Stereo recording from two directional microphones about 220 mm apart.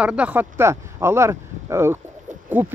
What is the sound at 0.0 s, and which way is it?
Speech, 5° right (ahead or behind).